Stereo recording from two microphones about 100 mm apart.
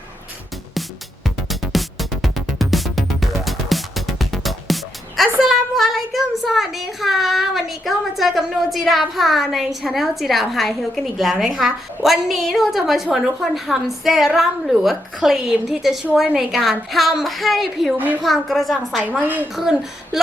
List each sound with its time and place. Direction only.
0.7 s music: centre (ahead or behind)
16.1 s a woman's voice: centre (ahead or behind)
17.9 s a woman's voice: 15° right (ahead or behind)
18.2 s a woman's voice: centre (ahead or behind)
19.0 s a woman's voice: 15° right (ahead or behind)